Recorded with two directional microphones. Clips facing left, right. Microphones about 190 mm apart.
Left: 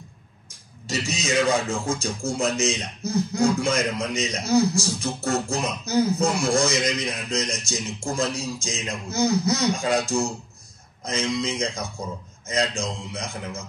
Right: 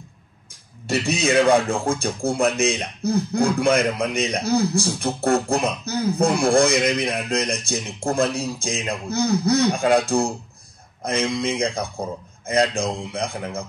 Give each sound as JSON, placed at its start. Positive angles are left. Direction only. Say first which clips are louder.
{"t": 0.8, "sound": "speech", "louder": "right 6 dB", "side_deg": -55}